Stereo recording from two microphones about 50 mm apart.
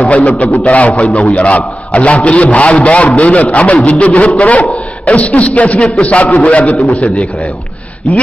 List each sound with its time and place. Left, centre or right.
0.2 s a man's voice: centre